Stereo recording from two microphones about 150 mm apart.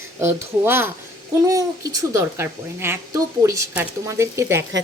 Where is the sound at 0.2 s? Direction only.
15° right (ahead or behind).